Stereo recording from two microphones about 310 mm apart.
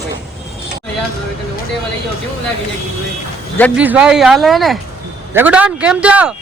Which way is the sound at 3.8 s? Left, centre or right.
Centre.